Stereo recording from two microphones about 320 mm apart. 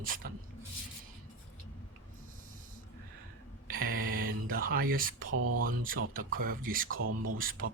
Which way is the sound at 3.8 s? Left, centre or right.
Right.